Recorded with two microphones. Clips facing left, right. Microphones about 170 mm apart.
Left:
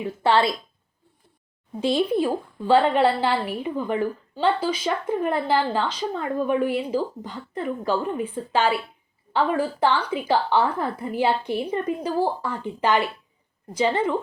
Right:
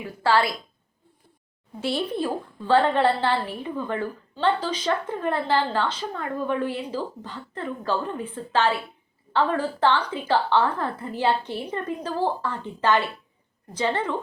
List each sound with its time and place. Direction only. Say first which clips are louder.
0.0 s a woman's voice: left 2 dB; 25° left (ahead or behind)
1.8 s a woman's voice: left 5 dB; 15° left (ahead or behind)